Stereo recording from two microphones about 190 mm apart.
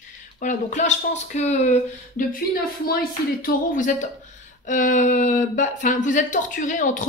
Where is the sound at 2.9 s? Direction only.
50° left (ahead or behind).